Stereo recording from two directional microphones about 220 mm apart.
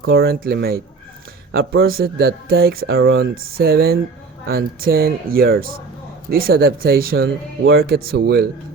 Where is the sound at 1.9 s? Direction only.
45° right (ahead or behind).